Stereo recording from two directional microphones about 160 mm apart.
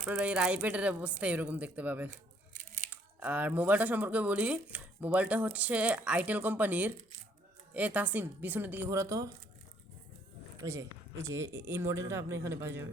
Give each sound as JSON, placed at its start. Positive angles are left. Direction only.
{"t": 0.0, "sound": "speech", "side_deg": -5}
{"t": 10.6, "sound": "speech", "side_deg": -20}